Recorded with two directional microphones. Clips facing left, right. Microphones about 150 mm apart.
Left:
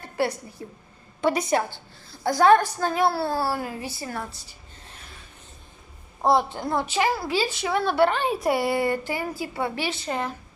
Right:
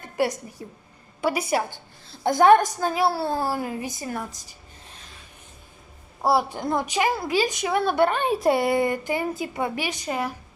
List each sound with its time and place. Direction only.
0.2 s a woman's voice: 15° right (ahead or behind)
0.6 s a woman's voice: 25° right (ahead or behind)
1.2 s a woman's voice: 10° right (ahead or behind)
2.0 s a woman's voice: 20° right (ahead or behind)
6.2 s a woman's voice: 5° right (ahead or behind)
6.6 s a woman's voice: 15° right (ahead or behind)